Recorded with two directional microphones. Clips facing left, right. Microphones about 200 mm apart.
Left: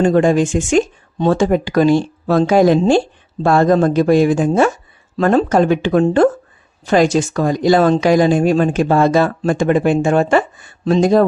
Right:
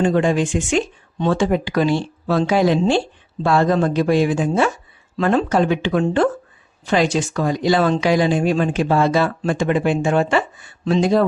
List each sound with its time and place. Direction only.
0.0 s speech: 45° left (ahead or behind)